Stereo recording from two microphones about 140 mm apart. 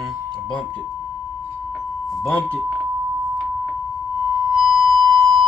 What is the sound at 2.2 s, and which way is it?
Speech, 10° left (ahead or behind).